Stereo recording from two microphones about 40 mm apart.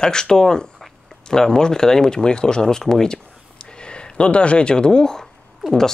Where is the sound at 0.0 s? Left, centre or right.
Centre.